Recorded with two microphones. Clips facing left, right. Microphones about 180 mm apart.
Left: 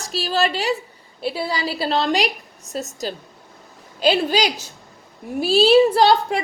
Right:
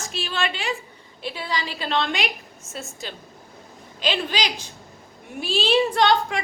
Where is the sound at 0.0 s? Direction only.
35° left (ahead or behind).